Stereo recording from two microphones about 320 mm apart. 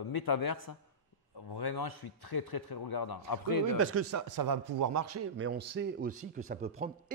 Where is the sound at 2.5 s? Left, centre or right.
Left.